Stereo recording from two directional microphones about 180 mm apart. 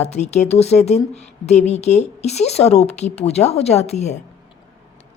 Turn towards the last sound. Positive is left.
turn(degrees=40)  # may be behind; listen again after turning